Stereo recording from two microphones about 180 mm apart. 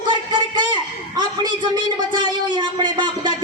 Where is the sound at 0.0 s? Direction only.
25° right (ahead or behind).